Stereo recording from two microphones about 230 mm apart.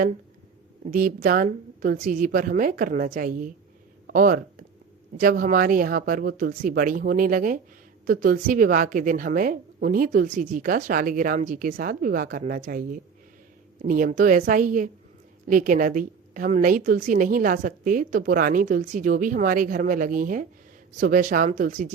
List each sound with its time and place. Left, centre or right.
0.9 s a woman's voice: right